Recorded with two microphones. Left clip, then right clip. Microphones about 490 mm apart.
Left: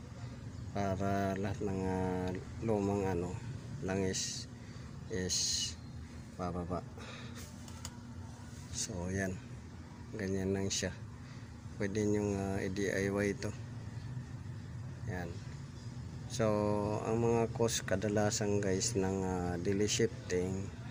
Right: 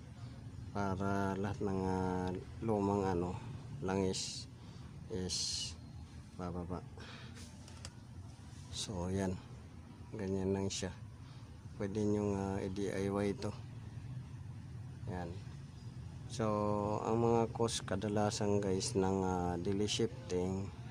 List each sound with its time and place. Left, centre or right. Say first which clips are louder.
0.7 s speech: left 3 dB; right
8.7 s speech: left 1 dB; right
16.3 s speech: left 3 dB; right